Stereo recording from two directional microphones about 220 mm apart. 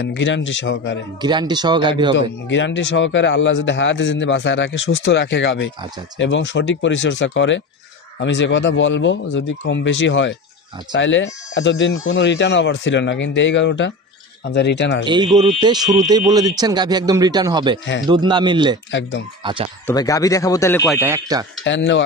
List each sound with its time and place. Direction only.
0.0 s speech: 55° left (ahead or behind)
1.2 s speech: 20° right (ahead or behind)
2.1 s speech: 55° left (ahead or behind)
15.0 s speech: 20° right (ahead or behind)
18.9 s speech: 55° left (ahead or behind)
19.4 s speech: 25° right (ahead or behind)
19.9 s speech: 15° left (ahead or behind)
20.8 s a man's voice: centre (ahead or behind)
21.1 s speech: 15° right (ahead or behind)
21.6 s speech: 55° left (ahead or behind)